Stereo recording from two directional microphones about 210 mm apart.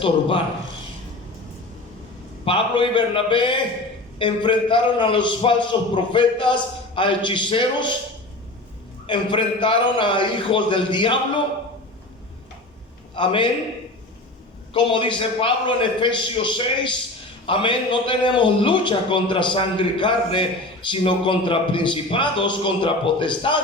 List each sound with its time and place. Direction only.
0.0 s a man's voice: 25° left (ahead or behind)
2.4 s a man's voice: 25° left (ahead or behind)
9.0 s a man's voice: 25° left (ahead or behind)
13.1 s a man's voice: 25° left (ahead or behind)
14.7 s a man's voice: 25° left (ahead or behind)